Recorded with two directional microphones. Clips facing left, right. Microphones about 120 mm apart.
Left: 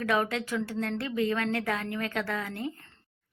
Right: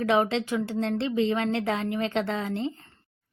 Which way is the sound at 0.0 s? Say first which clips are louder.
Right 5 dB; 20° right (ahead or behind).